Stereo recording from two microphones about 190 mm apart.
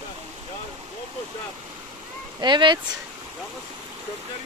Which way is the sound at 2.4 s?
25° right (ahead or behind).